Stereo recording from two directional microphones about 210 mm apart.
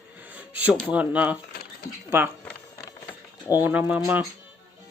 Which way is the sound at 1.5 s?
45° left (ahead or behind).